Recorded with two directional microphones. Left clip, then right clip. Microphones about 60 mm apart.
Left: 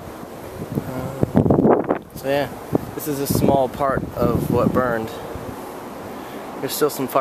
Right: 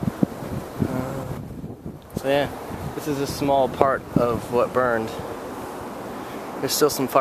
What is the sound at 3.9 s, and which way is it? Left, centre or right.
Speech, centre.